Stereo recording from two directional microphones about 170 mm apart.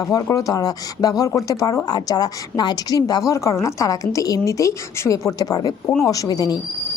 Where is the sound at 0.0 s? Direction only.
20° left (ahead or behind).